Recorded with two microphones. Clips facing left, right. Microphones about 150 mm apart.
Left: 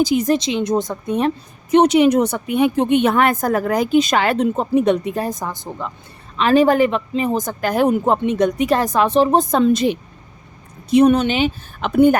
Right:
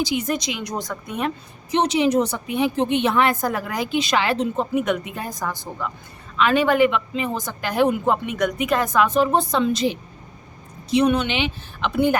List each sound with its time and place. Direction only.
0.0 s a woman's voice: 40° left (ahead or behind)
1.7 s a woman's voice: 55° left (ahead or behind)
4.7 s speech: 35° left (ahead or behind)
5.4 s a woman's voice: 20° left (ahead or behind)
6.3 s speech: 35° left (ahead or behind)
8.2 s speech: 30° left (ahead or behind); by 10.0 s 55° left (ahead or behind)
10.9 s a woman's voice: 45° left (ahead or behind)